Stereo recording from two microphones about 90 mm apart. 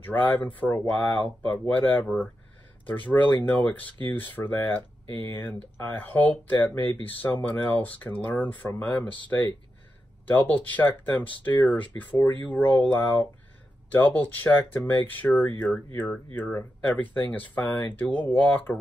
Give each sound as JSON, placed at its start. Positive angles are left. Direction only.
{"t": 0.0, "sound": "speech", "side_deg": 20}